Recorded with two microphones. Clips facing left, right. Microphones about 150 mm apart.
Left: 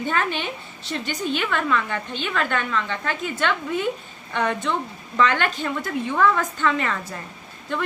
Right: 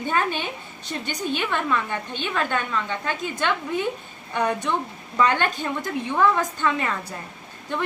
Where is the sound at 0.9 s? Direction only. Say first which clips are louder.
Left 1 dB; 15° right (ahead or behind).